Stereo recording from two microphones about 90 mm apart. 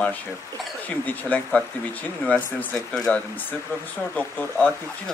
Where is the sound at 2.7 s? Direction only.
5° left (ahead or behind).